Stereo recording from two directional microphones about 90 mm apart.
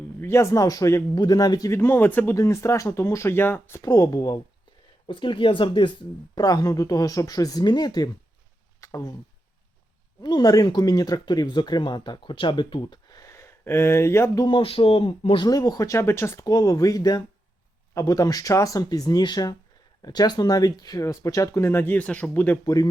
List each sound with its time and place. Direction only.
0.2 s speech: 30° left (ahead or behind)
1.7 s speech: 25° left (ahead or behind)
2.3 s speech: 35° left (ahead or behind)
3.8 s speech: 40° left (ahead or behind)
5.0 s speech: 70° left (ahead or behind)
6.3 s speech: 45° left (ahead or behind)
8.8 s speech: 40° left (ahead or behind)
10.2 s speech: 45° left (ahead or behind); by 14.4 s 30° left (ahead or behind)
14.4 s speech: 80° left
15.4 s speech: 45° left (ahead or behind); by 22.5 s 20° left (ahead or behind)
22.6 s speech: 40° left (ahead or behind)